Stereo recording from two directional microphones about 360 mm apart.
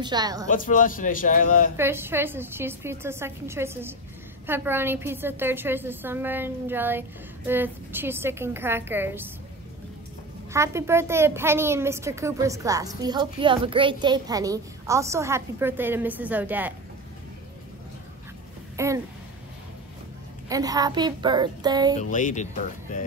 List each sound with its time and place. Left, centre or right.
0.0 s a woman's voice: centre
0.5 s a man's voice: left
1.8 s a woman's voice: centre
10.5 s a woman's voice: centre
18.8 s a woman's voice: centre
20.4 s a woman's voice: centre
22.1 s a man's voice: left